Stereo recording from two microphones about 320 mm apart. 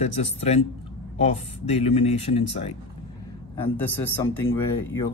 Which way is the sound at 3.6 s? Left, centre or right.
Centre.